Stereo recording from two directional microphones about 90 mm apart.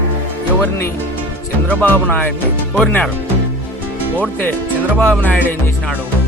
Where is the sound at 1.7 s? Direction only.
15° left (ahead or behind).